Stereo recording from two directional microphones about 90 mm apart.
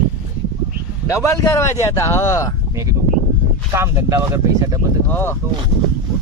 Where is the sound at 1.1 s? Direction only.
30° left (ahead or behind).